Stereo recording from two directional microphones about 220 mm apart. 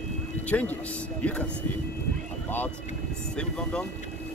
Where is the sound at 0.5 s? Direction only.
5° left (ahead or behind).